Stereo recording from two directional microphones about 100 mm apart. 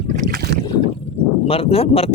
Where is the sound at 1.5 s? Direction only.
75° left (ahead or behind).